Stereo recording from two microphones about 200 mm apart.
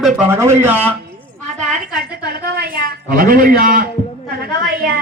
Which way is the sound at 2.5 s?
50° right (ahead or behind).